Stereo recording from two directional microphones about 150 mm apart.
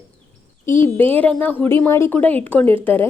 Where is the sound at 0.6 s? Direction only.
15° left (ahead or behind).